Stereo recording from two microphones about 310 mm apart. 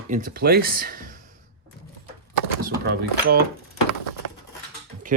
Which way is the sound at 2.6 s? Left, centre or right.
Right.